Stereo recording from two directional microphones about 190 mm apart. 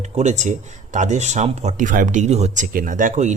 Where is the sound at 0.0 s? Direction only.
40° right (ahead or behind).